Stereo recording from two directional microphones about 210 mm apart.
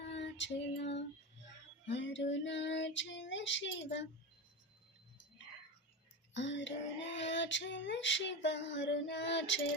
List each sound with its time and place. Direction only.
0.1 s female singing: 60° left (ahead or behind)
6.3 s female singing: 60° left (ahead or behind)